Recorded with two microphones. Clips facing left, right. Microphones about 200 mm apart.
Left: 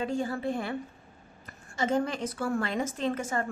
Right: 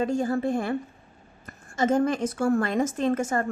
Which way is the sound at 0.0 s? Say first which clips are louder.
Right 6 dB; 45° right (ahead or behind).